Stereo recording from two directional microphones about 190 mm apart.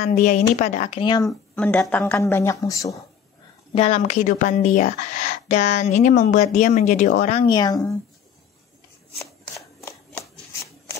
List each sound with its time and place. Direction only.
0.0 s a woman's voice: 40° left (ahead or behind); by 1.3 s 20° left (ahead or behind)
1.5 s speech: 10° left (ahead or behind)
3.7 s a woman's voice: 35° left (ahead or behind)
7.4 s speech: 20° left (ahead or behind)
9.8 s shuffling cards: 15° left (ahead or behind)